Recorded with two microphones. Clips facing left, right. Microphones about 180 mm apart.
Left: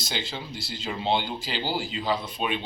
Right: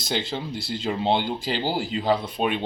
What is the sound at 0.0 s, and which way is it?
Speech, 55° right (ahead or behind).